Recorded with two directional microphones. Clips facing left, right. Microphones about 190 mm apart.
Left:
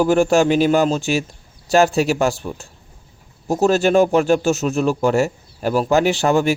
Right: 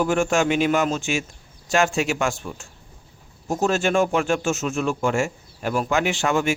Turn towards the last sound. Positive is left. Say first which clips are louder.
# left 5 dB
turn(degrees=35)  # may be behind; listen again after turning